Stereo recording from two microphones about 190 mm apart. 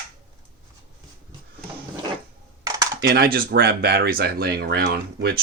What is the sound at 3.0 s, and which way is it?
Speech, 55° right (ahead or behind).